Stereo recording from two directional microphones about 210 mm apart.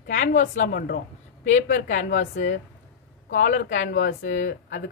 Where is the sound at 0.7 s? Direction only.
50° left (ahead or behind).